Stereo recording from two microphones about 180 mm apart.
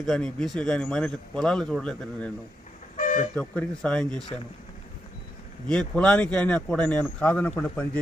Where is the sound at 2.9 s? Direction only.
45° left (ahead or behind).